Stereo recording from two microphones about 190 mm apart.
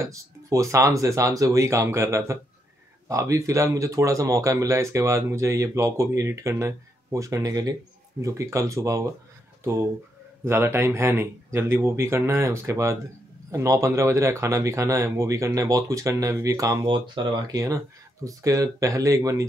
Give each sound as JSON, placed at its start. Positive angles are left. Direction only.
{"t": 0.0, "sound": "speech", "side_deg": -15}